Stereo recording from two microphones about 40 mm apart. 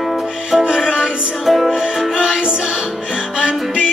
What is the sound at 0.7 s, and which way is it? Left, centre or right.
Music, centre.